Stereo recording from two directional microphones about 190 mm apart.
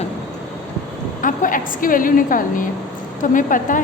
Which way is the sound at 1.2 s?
45° left (ahead or behind).